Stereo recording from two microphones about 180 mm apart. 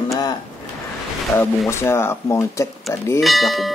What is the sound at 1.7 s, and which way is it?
Speech, 15° left (ahead or behind).